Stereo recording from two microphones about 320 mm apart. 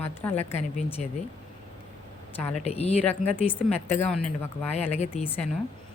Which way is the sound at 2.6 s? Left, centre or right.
Centre.